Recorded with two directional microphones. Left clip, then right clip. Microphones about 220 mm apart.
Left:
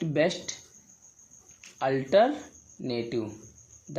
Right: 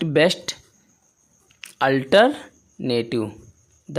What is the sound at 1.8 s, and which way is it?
Speech, 40° right (ahead or behind).